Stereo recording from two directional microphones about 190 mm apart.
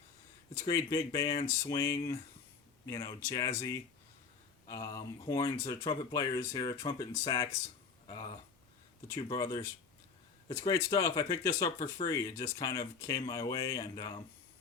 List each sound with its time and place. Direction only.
0.5 s speech: 15° left (ahead or behind)